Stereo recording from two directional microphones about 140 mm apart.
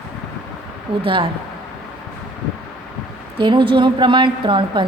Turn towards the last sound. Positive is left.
turn(degrees=-35)  # may be behind; listen again after turning